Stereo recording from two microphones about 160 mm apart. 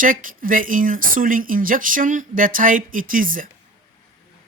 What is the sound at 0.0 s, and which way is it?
A woman's voice, 55° right (ahead or behind).